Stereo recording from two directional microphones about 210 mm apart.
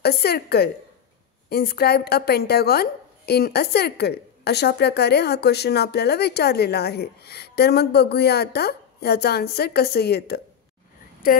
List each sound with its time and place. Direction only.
0.0 s a woman's voice: 50° left (ahead or behind)